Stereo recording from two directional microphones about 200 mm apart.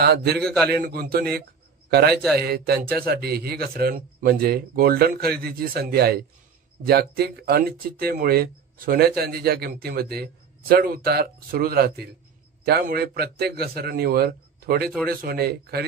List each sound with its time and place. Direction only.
0.0 s a man's voice: 55° right (ahead or behind)